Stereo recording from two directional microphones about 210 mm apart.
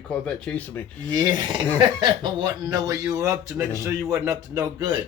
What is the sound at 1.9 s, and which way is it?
Speech, 20° right (ahead or behind).